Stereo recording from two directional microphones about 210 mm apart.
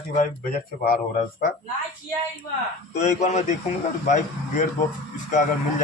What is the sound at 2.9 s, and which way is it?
Speech, 35° left (ahead or behind).